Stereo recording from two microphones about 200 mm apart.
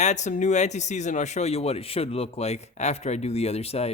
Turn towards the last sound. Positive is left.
turn(degrees=30)  # may be behind; listen again after turning